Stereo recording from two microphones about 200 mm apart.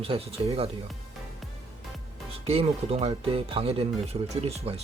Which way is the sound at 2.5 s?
30° right (ahead or behind).